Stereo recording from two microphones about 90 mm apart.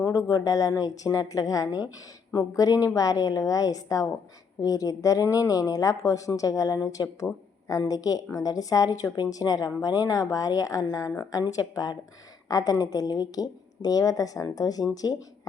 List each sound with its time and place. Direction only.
0.0 s a woman's voice: 40° left (ahead or behind)